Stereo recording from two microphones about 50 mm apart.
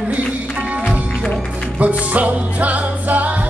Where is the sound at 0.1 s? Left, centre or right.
Right.